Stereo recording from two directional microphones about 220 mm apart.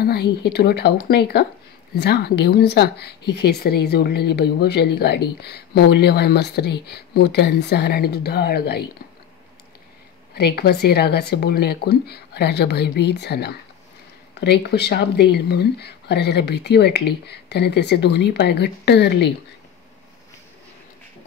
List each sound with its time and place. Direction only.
0.0 s speech: 45° left (ahead or behind)
10.3 s speech: 45° left (ahead or behind)